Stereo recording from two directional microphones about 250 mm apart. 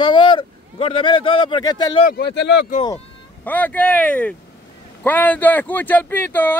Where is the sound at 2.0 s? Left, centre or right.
Left.